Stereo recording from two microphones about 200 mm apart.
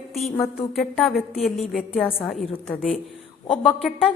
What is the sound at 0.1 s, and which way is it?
A woman's voice, centre (ahead or behind).